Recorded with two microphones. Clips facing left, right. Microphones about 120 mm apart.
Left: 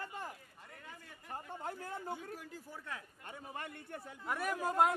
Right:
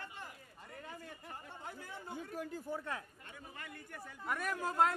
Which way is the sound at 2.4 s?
50° right (ahead or behind).